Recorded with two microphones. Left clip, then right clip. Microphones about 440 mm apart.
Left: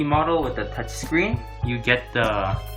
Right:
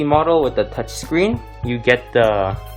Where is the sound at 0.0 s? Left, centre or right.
Centre.